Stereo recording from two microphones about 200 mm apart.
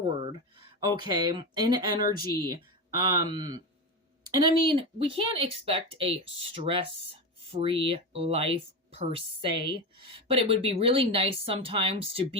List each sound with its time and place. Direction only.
0.3 s speech: 20° right (ahead or behind)
4.6 s speech: 25° right (ahead or behind)